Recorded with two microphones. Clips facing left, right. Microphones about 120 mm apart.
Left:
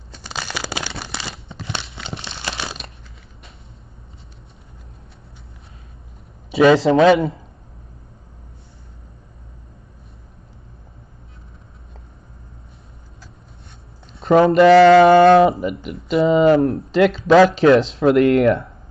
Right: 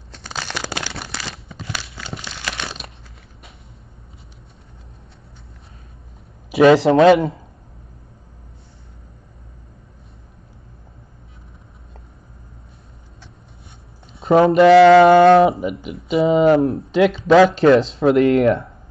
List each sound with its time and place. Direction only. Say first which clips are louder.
0.1 s crumpling: even; centre (ahead or behind)
0.8 s a sound: even; 5° right (ahead or behind)
1.7 s crumpling: left 1 dB; 25° left (ahead or behind)
6.6 s a man's voice: right 1 dB; 25° right (ahead or behind)
14.1 s speech: even; 5° right (ahead or behind)